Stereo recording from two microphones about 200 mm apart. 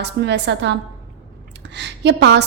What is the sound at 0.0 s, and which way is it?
A woman's voice, 60° right (ahead or behind).